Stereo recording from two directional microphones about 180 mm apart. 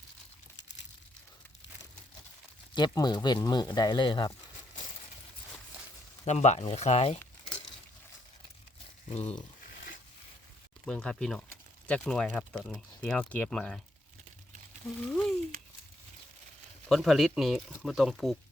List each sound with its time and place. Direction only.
0.5 s crumpling: 80° left
2.7 s speech: 25° left (ahead or behind)
6.2 s speech: 40° left (ahead or behind)
9.0 s speech: 35° left (ahead or behind)
10.8 s speech: 5° left (ahead or behind)
15.1 s speech: 5° left (ahead or behind)
16.9 s speech: centre (ahead or behind)